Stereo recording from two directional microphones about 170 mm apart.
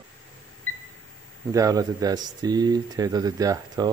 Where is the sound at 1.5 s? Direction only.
20° right (ahead or behind).